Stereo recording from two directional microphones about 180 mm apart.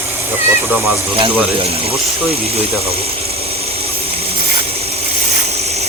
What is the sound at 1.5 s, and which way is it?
Speech, 30° right (ahead or behind).